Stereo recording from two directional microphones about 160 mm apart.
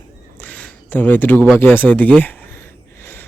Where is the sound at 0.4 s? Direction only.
10° left (ahead or behind).